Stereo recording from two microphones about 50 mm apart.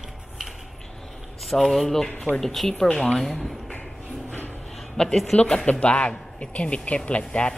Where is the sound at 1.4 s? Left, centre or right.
Centre.